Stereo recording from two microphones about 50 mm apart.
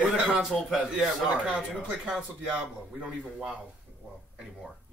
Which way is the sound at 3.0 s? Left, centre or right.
Right.